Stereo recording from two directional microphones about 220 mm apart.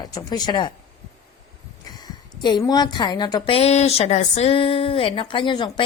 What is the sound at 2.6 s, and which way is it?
A woman's voice, 20° left (ahead or behind).